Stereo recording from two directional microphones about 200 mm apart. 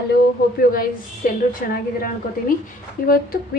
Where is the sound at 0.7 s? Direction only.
45° left (ahead or behind).